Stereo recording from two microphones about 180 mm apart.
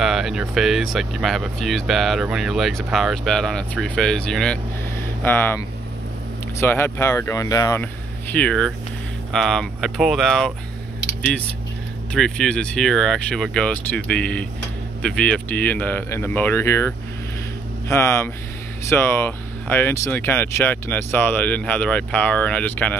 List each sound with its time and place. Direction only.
0.0 s speech: centre (ahead or behind)
6.6 s speech: 15° left (ahead or behind)
7.8 s speech: 5° left (ahead or behind)
12.1 s speech: 5° left (ahead or behind)